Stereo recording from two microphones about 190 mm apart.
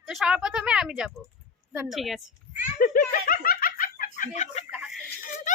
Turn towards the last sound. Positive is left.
turn(degrees=-5)  # may be behind; listen again after turning